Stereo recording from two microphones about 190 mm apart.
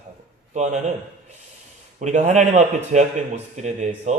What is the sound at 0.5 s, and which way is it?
Speech, 40° right (ahead or behind).